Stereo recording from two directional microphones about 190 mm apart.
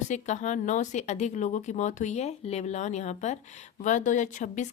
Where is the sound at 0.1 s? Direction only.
40° left (ahead or behind).